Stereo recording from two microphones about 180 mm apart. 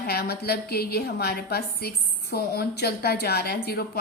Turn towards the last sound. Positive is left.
turn(degrees=60)  # may be behind; listen again after turning